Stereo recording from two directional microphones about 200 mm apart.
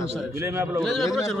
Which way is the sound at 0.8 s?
Centre (ahead or behind).